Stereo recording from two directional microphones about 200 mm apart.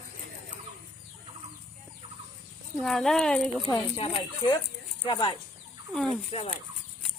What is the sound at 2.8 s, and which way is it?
Speech, centre (ahead or behind).